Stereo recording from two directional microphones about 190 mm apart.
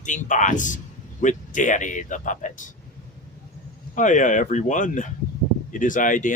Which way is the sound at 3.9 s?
40° left (ahead or behind).